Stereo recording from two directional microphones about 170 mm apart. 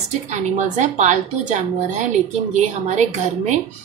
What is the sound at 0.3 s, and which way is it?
Speech, 45° right (ahead or behind).